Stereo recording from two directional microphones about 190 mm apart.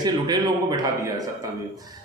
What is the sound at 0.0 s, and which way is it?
A man's voice, 20° right (ahead or behind).